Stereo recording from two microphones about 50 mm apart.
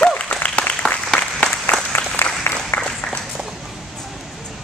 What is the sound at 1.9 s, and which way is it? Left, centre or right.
Applause, left.